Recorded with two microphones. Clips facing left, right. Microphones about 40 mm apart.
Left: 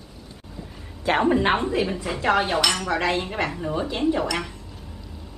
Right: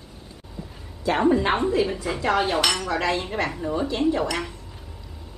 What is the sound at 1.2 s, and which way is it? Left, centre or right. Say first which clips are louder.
Cutlery: even; left.